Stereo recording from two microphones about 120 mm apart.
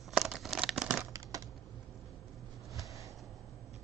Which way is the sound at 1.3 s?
30° right (ahead or behind).